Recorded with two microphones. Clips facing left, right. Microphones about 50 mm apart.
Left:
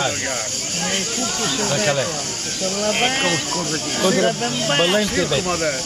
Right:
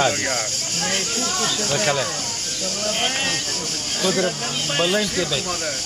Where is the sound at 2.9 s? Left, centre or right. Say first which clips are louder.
Left 4 dB; left.